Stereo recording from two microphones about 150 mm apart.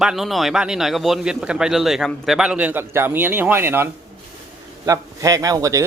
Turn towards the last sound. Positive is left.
turn(degrees=-20)  # may be behind; listen again after turning